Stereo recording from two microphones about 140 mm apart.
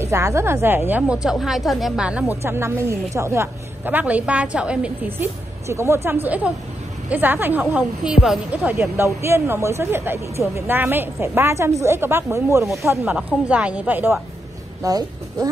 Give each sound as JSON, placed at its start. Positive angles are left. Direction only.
{"t": 0.0, "sound": "a woman's voice", "side_deg": -20}
{"t": 13.5, "sound": "a woman's voice", "side_deg": -10}
{"t": 14.8, "sound": "speech", "side_deg": -25}